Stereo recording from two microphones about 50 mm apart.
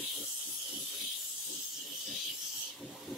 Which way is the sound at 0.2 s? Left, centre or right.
Centre.